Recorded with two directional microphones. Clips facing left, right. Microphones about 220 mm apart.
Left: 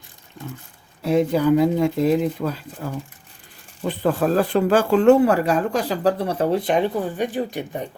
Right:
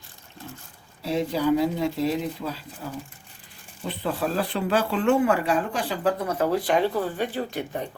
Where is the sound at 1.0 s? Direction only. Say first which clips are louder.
Left 6 dB; 55° left (ahead or behind); by 7.9 s 15° left (ahead or behind).